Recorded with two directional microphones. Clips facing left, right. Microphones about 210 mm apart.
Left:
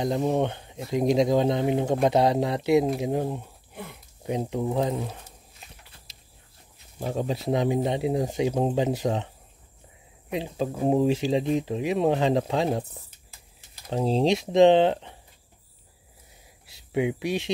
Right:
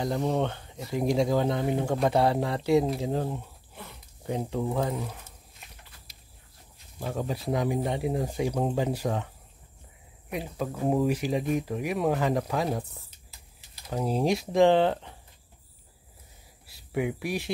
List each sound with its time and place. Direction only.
0.0 s speech: 20° left (ahead or behind)
7.0 s speech: 20° left (ahead or behind)
10.3 s speech: 25° left (ahead or behind)
13.8 s speech: 25° left (ahead or behind)
16.6 s speech: 20° left (ahead or behind)